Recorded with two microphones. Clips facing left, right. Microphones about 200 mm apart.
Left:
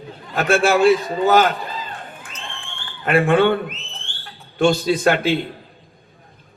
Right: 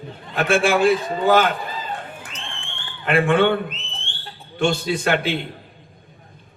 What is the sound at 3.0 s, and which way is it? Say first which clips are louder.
Speech: left 2 dB; 40° left (ahead or behind).